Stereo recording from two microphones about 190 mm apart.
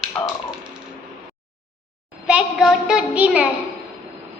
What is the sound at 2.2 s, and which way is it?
Child singing, 5° right (ahead or behind).